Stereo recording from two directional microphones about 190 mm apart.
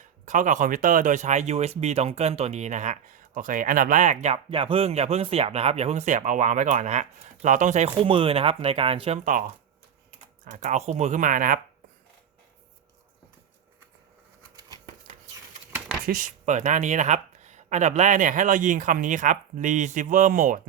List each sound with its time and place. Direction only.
0.3 s speech: 40° right (ahead or behind)
10.4 s speech: 40° right (ahead or behind)
16.0 s speech: 45° right (ahead or behind)